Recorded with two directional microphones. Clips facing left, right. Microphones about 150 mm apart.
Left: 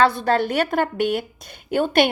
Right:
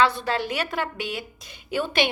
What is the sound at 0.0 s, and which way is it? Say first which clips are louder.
A woman's voice: left 4 dB; 50° left (ahead or behind).